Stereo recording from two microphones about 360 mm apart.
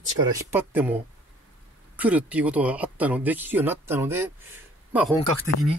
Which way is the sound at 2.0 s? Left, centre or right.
Centre.